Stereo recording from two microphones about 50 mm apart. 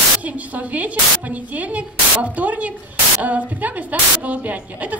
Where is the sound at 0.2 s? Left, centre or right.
Right.